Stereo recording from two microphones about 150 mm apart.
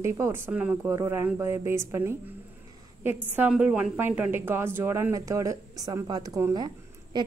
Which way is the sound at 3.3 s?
10° right (ahead or behind).